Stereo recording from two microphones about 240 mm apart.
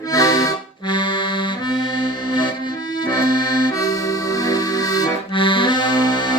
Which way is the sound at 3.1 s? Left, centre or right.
Centre.